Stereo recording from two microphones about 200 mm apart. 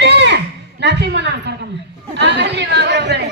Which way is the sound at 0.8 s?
55° right (ahead or behind).